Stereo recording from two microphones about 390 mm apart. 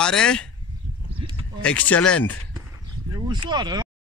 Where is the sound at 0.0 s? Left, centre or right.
Centre.